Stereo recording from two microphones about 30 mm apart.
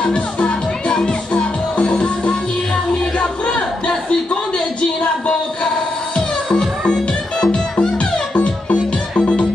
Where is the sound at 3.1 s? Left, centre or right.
Left.